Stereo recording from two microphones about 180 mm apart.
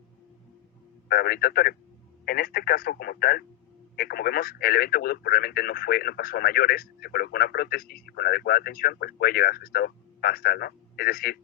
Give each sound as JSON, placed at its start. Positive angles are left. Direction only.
{"t": 1.0, "sound": "speech", "side_deg": 60}